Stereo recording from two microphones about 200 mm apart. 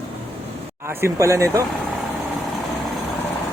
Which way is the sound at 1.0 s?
15° right (ahead or behind).